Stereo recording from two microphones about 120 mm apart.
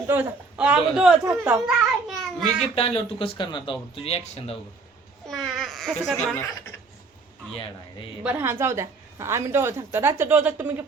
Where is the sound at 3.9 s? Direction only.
55° left (ahead or behind).